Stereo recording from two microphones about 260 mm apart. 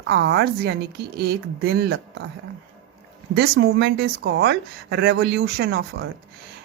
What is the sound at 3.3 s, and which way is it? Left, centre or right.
Speech, right.